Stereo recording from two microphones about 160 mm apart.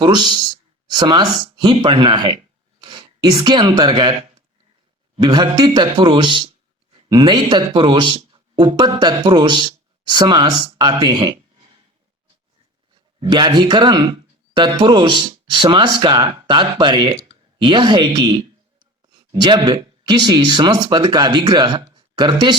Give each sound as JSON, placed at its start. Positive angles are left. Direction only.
{"t": 0.9, "sound": "a man's voice", "side_deg": -25}
{"t": 13.1, "sound": "speech", "side_deg": -30}